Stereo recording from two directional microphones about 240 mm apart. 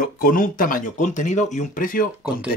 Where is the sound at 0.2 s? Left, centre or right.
Left.